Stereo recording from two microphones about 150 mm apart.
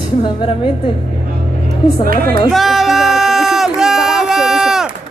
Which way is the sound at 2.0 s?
75° right (ahead or behind).